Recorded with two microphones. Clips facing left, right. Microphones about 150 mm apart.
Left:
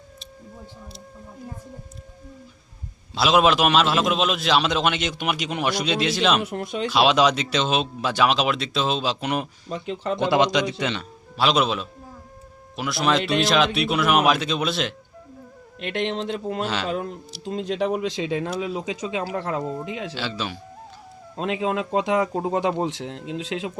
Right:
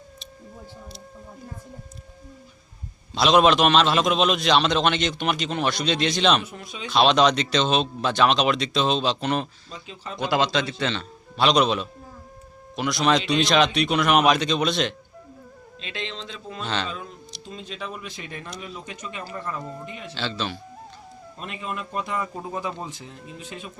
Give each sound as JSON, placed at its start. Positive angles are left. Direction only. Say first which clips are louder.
{"t": 3.1, "sound": "a man's voice", "louder": "right 1 dB", "side_deg": 5}
{"t": 6.4, "sound": "speech", "louder": "left 9 dB", "side_deg": 70}
{"t": 6.9, "sound": "a man's voice", "louder": "right 1 dB", "side_deg": 10}
{"t": 9.6, "sound": "speech", "louder": "left 11 dB", "side_deg": 70}
{"t": 10.2, "sound": "a man's voice", "louder": "left 2 dB", "side_deg": 20}
{"t": 15.8, "sound": "speech", "louder": "left 9 dB", "side_deg": 65}
{"t": 16.6, "sound": "a man's voice", "louder": "left 2 dB", "side_deg": 10}
{"t": 16.9, "sound": "speech", "louder": "left 9 dB", "side_deg": 65}
{"t": 20.1, "sound": "a man's voice", "louder": "even", "side_deg": 10}
{"t": 21.3, "sound": "speech", "louder": "left 9 dB", "side_deg": 90}